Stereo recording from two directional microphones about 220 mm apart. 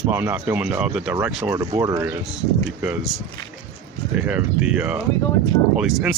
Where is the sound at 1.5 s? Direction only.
15° right (ahead or behind).